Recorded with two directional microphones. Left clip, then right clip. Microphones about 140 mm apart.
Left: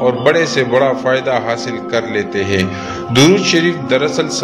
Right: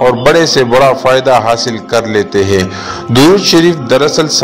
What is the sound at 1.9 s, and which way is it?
A man's voice, 50° right (ahead or behind).